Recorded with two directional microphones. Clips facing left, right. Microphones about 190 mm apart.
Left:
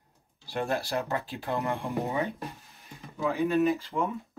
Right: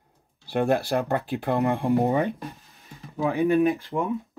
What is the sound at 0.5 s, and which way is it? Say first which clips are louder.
Speech: right 7 dB; 60° right (ahead or behind).